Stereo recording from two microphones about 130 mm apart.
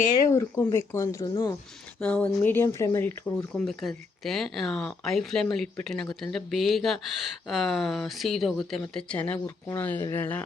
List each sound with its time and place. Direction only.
0.3 s speech: 20° left (ahead or behind)
2.0 s speech: 10° left (ahead or behind)
3.5 s speech: centre (ahead or behind)
9.1 s speech: 10° left (ahead or behind)